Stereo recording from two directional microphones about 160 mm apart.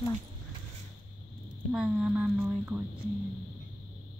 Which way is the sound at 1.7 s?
5° right (ahead or behind).